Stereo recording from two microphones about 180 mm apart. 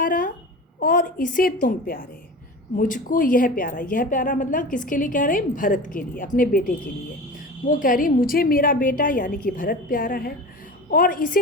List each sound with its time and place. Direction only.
0.0 s babbling: 50° left (ahead or behind)
0.8 s a woman's voice: 50° left (ahead or behind)